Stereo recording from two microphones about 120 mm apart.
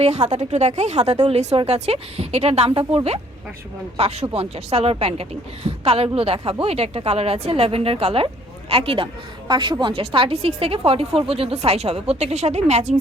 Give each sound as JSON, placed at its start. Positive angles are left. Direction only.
{"t": 0.0, "sound": "a man's voice", "side_deg": -70}